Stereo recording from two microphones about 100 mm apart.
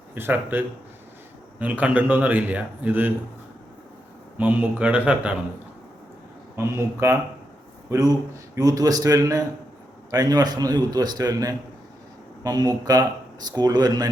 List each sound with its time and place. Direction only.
0.1 s a man's voice: 20° right (ahead or behind)
4.4 s a man's voice: 15° right (ahead or behind)
6.6 s a man's voice: 30° right (ahead or behind)